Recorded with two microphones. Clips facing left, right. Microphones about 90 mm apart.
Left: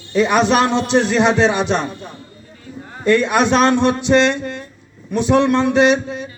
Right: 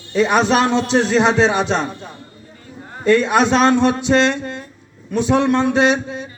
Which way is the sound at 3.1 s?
30° right (ahead or behind).